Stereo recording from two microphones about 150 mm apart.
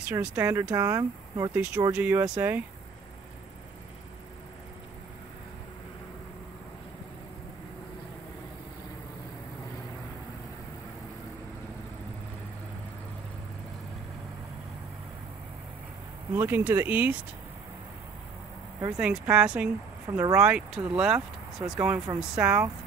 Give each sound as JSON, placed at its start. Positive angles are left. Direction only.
{"t": 0.1, "sound": "speech", "side_deg": -15}
{"t": 1.5, "sound": "speech", "side_deg": -10}
{"t": 16.3, "sound": "speech", "side_deg": -15}
{"t": 18.9, "sound": "speech", "side_deg": -10}
{"t": 20.1, "sound": "speech", "side_deg": -20}
{"t": 20.3, "sound": "speech", "side_deg": -10}